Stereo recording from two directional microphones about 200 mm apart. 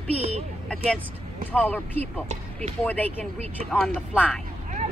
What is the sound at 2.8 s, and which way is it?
Speech, 10° left (ahead or behind).